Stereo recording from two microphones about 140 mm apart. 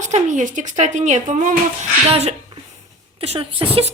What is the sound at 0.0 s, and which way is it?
A woman's voice, 60° right (ahead or behind).